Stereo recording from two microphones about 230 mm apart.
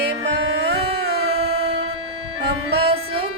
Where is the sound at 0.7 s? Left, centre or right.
Right.